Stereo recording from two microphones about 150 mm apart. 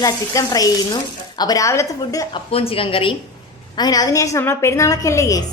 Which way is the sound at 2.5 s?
40° left (ahead or behind).